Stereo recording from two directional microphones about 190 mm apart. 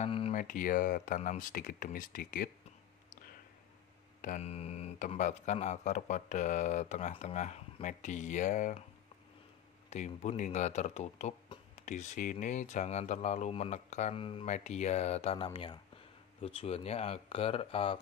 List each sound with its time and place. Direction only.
0.0 s a sound: 30° left (ahead or behind)
0.4 s speech: 45° left (ahead or behind)
4.2 s speech: 40° left (ahead or behind)
9.8 s speech: 35° left (ahead or behind)